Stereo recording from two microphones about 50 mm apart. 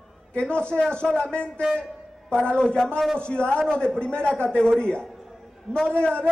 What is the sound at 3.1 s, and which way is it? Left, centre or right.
A man's voice, centre.